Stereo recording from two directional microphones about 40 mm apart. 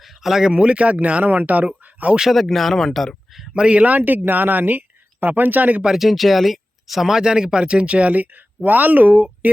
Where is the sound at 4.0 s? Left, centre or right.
Right.